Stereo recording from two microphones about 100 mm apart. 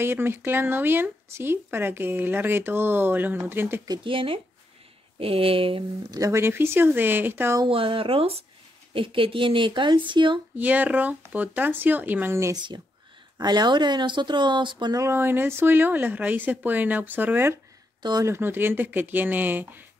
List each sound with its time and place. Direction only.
0.0 s speech: 25° right (ahead or behind)
4.0 s speech: 60° right (ahead or behind)
6.1 s speech: 30° right (ahead or behind)
7.6 s speech: 65° right (ahead or behind)
8.9 s speech: 60° right (ahead or behind)
10.5 s speech: 15° right (ahead or behind)
12.5 s speech: 45° right (ahead or behind)
15.0 s speech: 25° right (ahead or behind)